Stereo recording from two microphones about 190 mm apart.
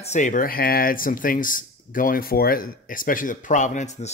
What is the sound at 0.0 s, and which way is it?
Speech, 40° left (ahead or behind).